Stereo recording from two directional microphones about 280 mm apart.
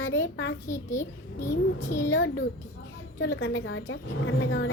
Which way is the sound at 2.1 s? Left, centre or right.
Left.